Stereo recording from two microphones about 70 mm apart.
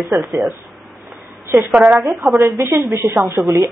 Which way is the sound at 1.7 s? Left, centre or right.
Right.